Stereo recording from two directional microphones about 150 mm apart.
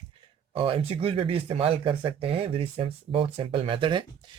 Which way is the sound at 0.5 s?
35° right (ahead or behind).